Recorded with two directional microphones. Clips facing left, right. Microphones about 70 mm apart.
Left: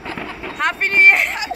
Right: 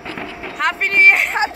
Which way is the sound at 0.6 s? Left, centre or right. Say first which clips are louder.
Even; centre.